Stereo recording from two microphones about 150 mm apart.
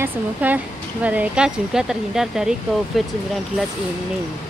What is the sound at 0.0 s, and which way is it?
Speech, 10° right (ahead or behind).